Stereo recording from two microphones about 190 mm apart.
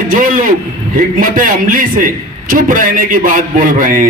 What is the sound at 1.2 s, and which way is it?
A man's voice, 45° right (ahead or behind).